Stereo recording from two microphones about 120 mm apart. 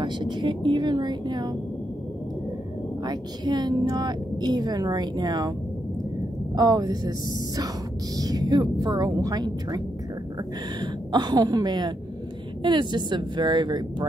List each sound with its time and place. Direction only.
0.0 s speech: 40° right (ahead or behind)
3.1 s speech: 35° right (ahead or behind)
6.5 s speech: 35° right (ahead or behind)
10.8 s speech: 35° right (ahead or behind)